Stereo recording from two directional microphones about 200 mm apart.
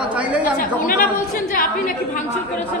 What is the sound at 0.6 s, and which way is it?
A woman's voice, 45° left (ahead or behind).